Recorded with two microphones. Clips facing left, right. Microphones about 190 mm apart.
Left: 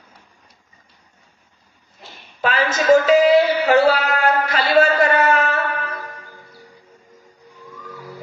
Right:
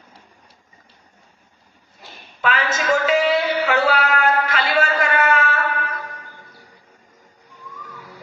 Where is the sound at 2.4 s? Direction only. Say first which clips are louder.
Left 4 dB; 35° left (ahead or behind).